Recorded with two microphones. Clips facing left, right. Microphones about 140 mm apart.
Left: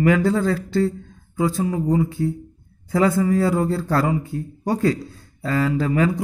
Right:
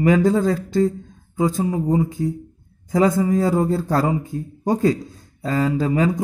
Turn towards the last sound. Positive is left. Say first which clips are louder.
# right 1 dB
turn(degrees=-20)  # may be behind; listen again after turning